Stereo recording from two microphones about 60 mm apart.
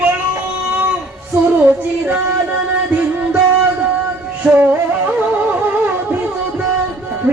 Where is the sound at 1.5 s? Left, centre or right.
Right.